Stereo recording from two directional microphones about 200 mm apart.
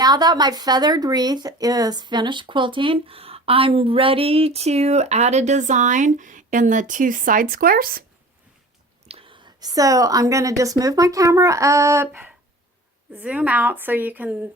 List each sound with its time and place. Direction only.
0.0 s speech: 20° right (ahead or behind); by 8.0 s 45° right (ahead or behind)
9.0 s a woman's voice: 30° right (ahead or behind); by 14.3 s 10° right (ahead or behind)